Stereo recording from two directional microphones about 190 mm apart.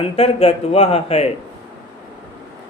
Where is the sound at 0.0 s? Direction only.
30° left (ahead or behind).